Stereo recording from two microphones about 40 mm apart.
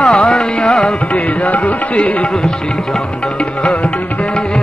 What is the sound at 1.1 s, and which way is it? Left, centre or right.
Music, left.